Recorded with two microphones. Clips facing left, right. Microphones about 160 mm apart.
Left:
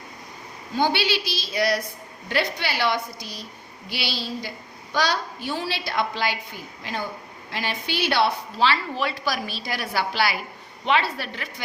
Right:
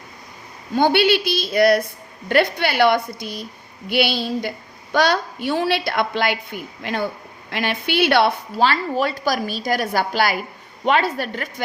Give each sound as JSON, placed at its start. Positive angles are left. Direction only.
{"t": 0.8, "sound": "a woman's voice", "side_deg": -55}